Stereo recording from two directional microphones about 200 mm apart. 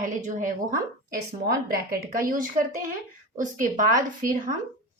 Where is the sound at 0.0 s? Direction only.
40° right (ahead or behind).